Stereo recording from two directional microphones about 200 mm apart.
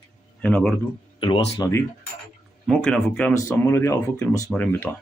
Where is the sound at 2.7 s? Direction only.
Centre (ahead or behind).